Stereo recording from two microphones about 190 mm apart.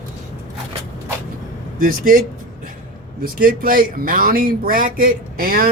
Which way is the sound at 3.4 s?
50° right (ahead or behind).